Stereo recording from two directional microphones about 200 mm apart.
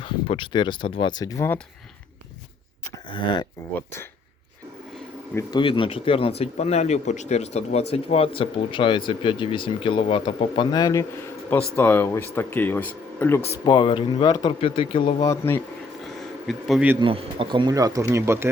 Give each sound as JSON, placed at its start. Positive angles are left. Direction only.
{"t": 0.0, "sound": "speech", "side_deg": 25}
{"t": 3.1, "sound": "speech", "side_deg": 25}
{"t": 5.5, "sound": "speech", "side_deg": 25}
{"t": 13.7, "sound": "speech", "side_deg": 25}
{"t": 15.2, "sound": "speech", "side_deg": 15}
{"t": 16.0, "sound": "a sound", "side_deg": 0}
{"t": 17.0, "sound": "speech", "side_deg": -25}